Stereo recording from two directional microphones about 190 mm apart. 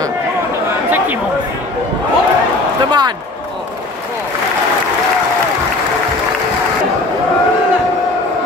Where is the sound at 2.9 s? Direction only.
25° right (ahead or behind).